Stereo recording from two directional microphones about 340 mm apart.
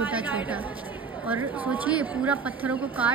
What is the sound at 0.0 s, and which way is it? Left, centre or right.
Chatter, centre.